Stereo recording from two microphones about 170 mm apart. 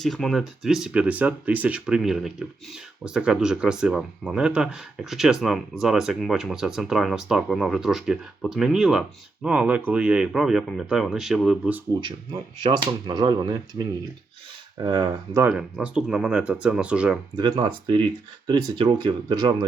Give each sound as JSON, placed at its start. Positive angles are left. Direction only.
{"t": 0.0, "sound": "speech", "side_deg": 0}
{"t": 12.6, "sound": "speech", "side_deg": -25}
{"t": 15.5, "sound": "speech", "side_deg": -5}
{"t": 17.3, "sound": "speech", "side_deg": -25}